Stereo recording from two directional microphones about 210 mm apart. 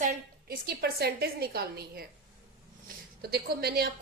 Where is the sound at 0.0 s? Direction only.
45° right (ahead or behind).